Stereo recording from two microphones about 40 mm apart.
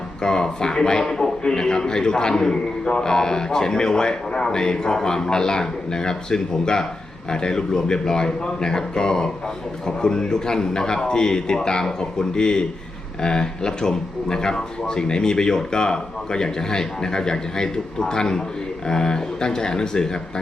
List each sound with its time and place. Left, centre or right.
0.2 s a man's voice: centre